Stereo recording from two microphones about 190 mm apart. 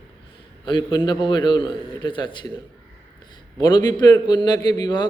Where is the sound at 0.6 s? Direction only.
25° left (ahead or behind).